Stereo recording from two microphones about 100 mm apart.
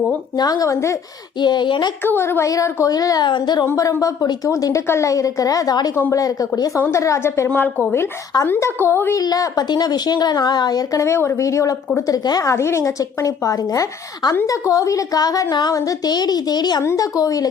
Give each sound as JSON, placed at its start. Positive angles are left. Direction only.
{"t": 0.3, "sound": "a woman's voice", "side_deg": 40}
{"t": 1.4, "sound": "a woman's voice", "side_deg": 50}
{"t": 2.0, "sound": "a woman's voice", "side_deg": 25}
{"t": 3.2, "sound": "a woman's voice", "side_deg": 50}
{"t": 3.8, "sound": "a woman's voice", "side_deg": 35}
{"t": 5.9, "sound": "a woman's voice", "side_deg": 25}
{"t": 9.2, "sound": "a woman's voice", "side_deg": 40}
{"t": 16.8, "sound": "a woman's voice", "side_deg": 30}